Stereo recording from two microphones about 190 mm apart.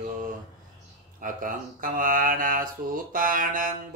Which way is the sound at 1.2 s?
45° right (ahead or behind).